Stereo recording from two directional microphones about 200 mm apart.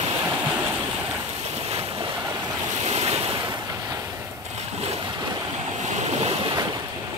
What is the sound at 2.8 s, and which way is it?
Waves, 35° right (ahead or behind).